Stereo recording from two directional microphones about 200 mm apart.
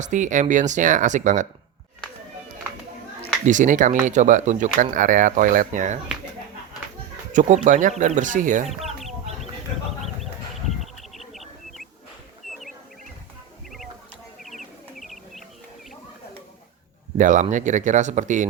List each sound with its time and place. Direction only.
0.0 s speech: 40° right (ahead or behind)
3.4 s speech: 40° right (ahead or behind)
7.3 s speech: 40° right (ahead or behind)
10.8 s bird: centre (ahead or behind)
12.4 s a sound: centre (ahead or behind)
14.4 s bird: centre (ahead or behind)
17.2 s speech: 40° right (ahead or behind)